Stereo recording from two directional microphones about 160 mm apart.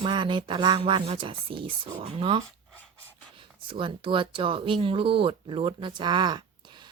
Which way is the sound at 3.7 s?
30° right (ahead or behind).